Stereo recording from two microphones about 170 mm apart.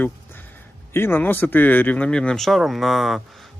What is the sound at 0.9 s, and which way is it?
Speech, 15° left (ahead or behind).